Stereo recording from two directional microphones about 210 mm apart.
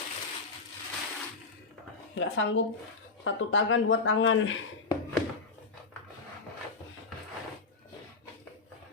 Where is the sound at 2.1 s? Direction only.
60° left (ahead or behind).